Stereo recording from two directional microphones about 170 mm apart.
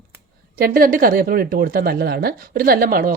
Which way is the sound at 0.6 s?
60° right (ahead or behind).